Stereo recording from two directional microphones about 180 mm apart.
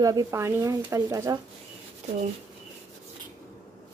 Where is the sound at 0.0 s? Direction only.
20° right (ahead or behind).